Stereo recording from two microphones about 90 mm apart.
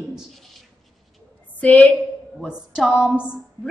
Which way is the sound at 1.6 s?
20° left (ahead or behind).